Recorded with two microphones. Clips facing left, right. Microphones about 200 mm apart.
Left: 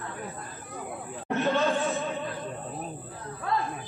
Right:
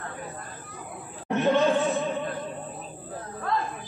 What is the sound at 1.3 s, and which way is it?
Chatter, 15° right (ahead or behind).